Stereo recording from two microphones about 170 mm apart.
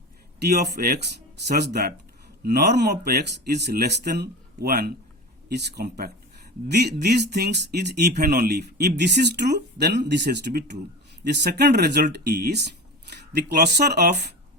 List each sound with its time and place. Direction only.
0.3 s speech: 75° right (ahead or behind)
2.4 s speech: 70° right (ahead or behind)